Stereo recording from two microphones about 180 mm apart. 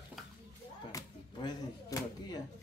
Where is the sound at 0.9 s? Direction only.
20° left (ahead or behind).